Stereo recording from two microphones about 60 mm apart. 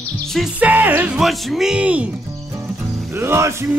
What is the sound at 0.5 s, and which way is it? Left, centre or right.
Music, right.